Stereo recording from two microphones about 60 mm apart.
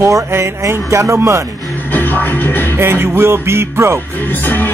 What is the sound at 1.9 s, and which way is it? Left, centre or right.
Music, left.